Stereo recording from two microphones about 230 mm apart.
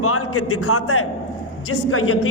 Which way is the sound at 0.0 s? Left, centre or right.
Left.